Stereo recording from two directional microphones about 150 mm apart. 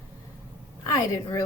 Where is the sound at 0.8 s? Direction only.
20° left (ahead or behind).